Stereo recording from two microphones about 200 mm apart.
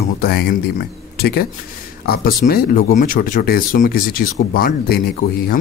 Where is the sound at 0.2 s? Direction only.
55° left (ahead or behind).